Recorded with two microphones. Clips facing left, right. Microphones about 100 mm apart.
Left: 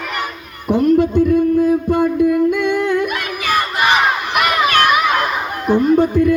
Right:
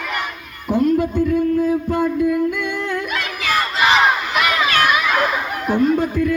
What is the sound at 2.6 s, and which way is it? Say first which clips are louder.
Humming: left 7 dB; 70° left (ahead or behind).